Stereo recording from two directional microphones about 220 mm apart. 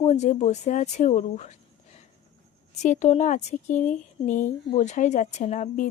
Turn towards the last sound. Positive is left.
turn(degrees=35)  # may be behind; listen again after turning